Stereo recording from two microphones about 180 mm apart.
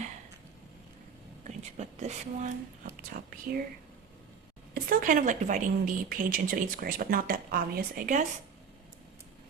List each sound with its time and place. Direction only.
1.5 s speech: 40° right (ahead or behind)
4.7 s a woman's voice: 50° right (ahead or behind)